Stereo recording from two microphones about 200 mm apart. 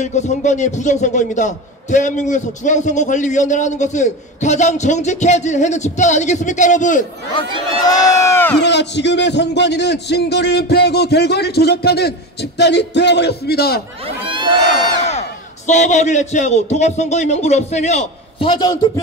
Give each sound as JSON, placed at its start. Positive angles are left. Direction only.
{"t": 0.0, "sound": "a man's voice", "side_deg": 35}
{"t": 7.8, "sound": "speech", "side_deg": 20}
{"t": 8.6, "sound": "a man's voice", "side_deg": 60}
{"t": 15.0, "sound": "a man's voice", "side_deg": 35}